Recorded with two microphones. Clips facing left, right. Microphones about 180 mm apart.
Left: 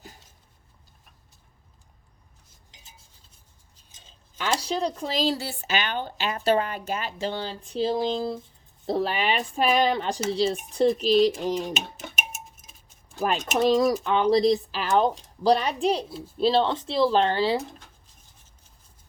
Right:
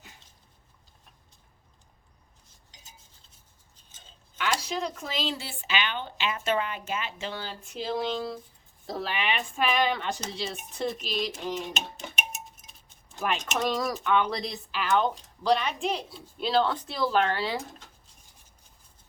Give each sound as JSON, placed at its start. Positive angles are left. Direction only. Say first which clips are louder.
{"t": 4.4, "sound": "speech", "louder": "left 3 dB", "side_deg": 35}
{"t": 11.7, "sound": "a sound", "louder": "left 3 dB", "side_deg": 5}
{"t": 13.2, "sound": "speech", "louder": "left 5 dB", "side_deg": 40}
{"t": 13.7, "sound": "speech", "louder": "left 5 dB", "side_deg": 30}